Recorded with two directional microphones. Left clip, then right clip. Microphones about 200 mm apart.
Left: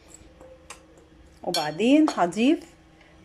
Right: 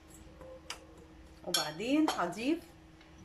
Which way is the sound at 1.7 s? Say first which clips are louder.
Left 13 dB; 40° left (ahead or behind).